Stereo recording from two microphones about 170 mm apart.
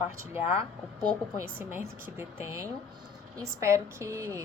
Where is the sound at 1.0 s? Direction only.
15° right (ahead or behind).